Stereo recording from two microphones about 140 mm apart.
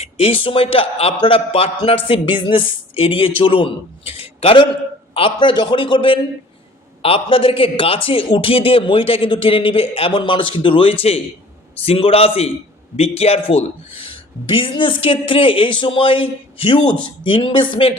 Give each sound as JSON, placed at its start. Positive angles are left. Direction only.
{"t": 0.0, "sound": "a man's voice", "side_deg": 45}